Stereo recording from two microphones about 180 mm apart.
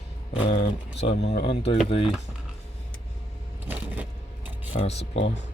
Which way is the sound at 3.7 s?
10° right (ahead or behind).